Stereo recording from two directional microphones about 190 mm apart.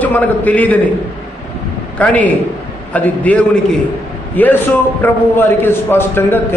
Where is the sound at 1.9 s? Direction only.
5° left (ahead or behind).